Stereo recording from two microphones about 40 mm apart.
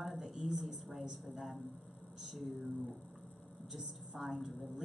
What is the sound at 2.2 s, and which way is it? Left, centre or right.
Speech, centre.